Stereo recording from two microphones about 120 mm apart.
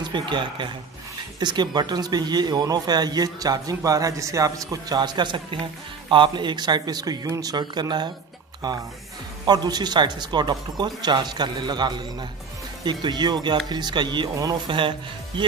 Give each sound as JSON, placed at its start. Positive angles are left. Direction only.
{"t": 0.0, "sound": "speech", "side_deg": -40}